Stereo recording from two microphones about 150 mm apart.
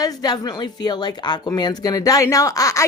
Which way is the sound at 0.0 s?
25° left (ahead or behind).